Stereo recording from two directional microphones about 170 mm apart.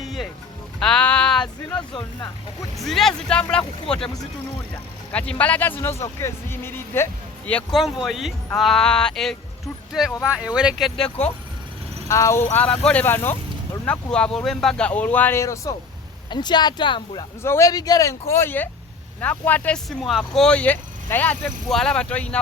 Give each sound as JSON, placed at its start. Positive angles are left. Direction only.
{"t": 0.0, "sound": "music", "side_deg": 0}
{"t": 0.8, "sound": "sheep", "side_deg": 5}
{"t": 1.9, "sound": "speech", "side_deg": 25}
{"t": 2.7, "sound": "speech", "side_deg": 0}
{"t": 12.0, "sound": "speech", "side_deg": 20}
{"t": 17.4, "sound": "speech", "side_deg": 15}